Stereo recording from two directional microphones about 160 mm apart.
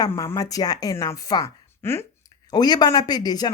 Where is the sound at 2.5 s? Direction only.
25° left (ahead or behind).